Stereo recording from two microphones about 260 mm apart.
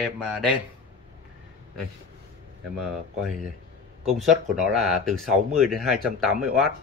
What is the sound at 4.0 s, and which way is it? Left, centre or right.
Speech, centre.